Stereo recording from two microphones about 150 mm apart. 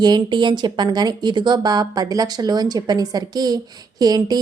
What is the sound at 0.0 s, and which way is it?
Speech, 30° right (ahead or behind).